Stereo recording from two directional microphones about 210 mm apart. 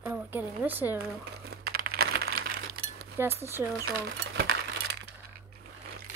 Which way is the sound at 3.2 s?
10° right (ahead or behind).